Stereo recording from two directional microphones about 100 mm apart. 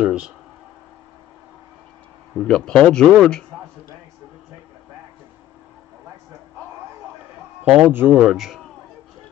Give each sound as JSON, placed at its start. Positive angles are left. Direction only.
{"t": 0.0, "sound": "speech", "side_deg": -10}
{"t": 2.3, "sound": "a man's voice", "side_deg": 5}
{"t": 7.6, "sound": "speech", "side_deg": -10}
{"t": 7.9, "sound": "speech", "side_deg": -20}
{"t": 8.2, "sound": "a man's voice", "side_deg": -5}